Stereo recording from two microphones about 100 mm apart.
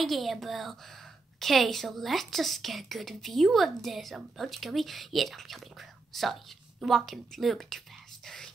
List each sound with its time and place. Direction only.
0.0 s a woman's voice: centre (ahead or behind)